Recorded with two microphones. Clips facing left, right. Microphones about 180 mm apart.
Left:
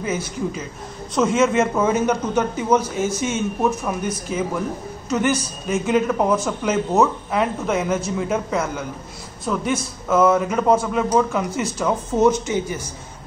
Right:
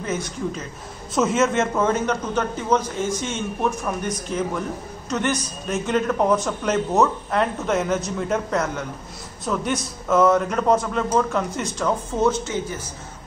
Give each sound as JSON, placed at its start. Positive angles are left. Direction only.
{"t": 0.0, "sound": "a man's voice", "side_deg": 5}